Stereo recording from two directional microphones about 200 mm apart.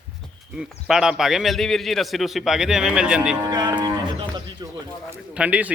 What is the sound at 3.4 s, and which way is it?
Cattle, 20° right (ahead or behind).